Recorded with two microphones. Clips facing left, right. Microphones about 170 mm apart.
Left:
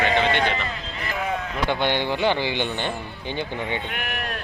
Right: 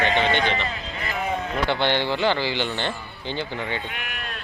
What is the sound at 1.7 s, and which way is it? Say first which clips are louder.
A man's voice: even; 15° left (ahead or behind).